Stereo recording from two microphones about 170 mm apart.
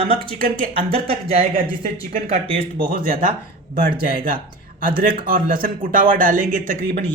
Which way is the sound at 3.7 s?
55° right (ahead or behind).